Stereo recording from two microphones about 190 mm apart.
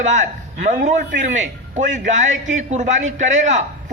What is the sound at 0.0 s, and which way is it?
A man's voice, 40° right (ahead or behind).